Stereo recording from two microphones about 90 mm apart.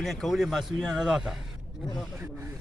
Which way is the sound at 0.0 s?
Centre (ahead or behind).